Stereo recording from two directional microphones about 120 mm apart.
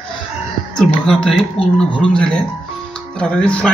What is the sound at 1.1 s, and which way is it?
Speech, 5° left (ahead or behind).